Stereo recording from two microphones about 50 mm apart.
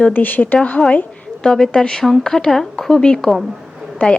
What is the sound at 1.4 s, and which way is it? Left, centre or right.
A woman's voice, centre.